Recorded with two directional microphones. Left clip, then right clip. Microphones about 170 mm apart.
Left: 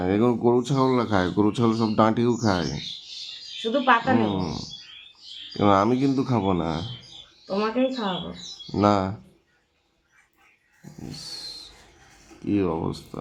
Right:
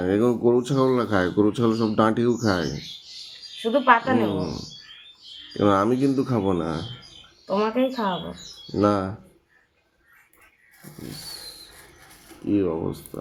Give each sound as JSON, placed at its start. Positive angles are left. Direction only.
{"t": 0.0, "sound": "speech", "side_deg": 10}
{"t": 5.5, "sound": "speech", "side_deg": 10}
{"t": 12.5, "sound": "speech", "side_deg": 15}